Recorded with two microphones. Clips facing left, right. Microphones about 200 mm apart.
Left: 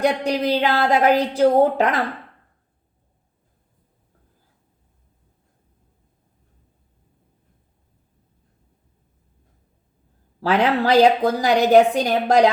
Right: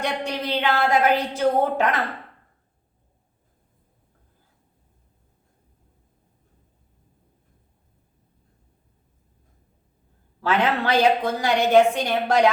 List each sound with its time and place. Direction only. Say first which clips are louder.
0.0 s a woman's voice: left 7 dB; 35° left (ahead or behind)
10.4 s a woman's voice: left 4 dB; 35° left (ahead or behind)